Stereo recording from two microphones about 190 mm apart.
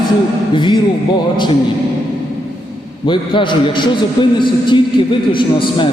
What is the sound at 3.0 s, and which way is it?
A man's voice, 25° left (ahead or behind).